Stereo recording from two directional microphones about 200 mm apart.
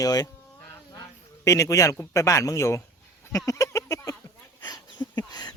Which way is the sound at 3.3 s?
15° left (ahead or behind).